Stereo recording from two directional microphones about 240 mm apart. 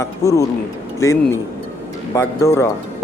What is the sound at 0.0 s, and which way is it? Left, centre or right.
Speech, centre.